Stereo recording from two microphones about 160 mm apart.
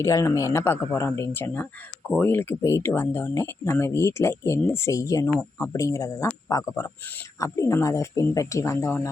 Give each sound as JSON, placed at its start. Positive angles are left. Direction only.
{"t": 0.0, "sound": "speech", "side_deg": 20}